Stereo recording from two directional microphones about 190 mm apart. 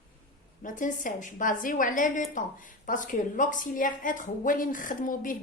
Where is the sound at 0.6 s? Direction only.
45° left (ahead or behind).